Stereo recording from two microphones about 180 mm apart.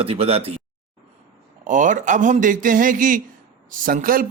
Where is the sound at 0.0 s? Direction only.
35° right (ahead or behind).